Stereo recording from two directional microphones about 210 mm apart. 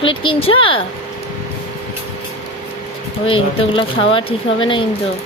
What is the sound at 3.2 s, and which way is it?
Speech, 25° left (ahead or behind).